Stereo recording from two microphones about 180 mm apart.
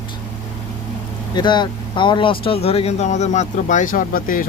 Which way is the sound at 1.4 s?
25° left (ahead or behind).